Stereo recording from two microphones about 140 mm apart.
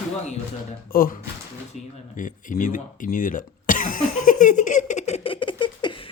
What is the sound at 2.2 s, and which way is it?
Speech, 70° left (ahead or behind).